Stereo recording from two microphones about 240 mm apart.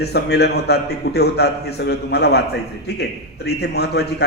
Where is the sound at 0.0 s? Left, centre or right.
Left.